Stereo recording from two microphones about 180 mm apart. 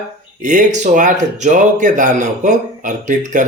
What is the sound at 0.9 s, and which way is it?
Speech, 45° right (ahead or behind).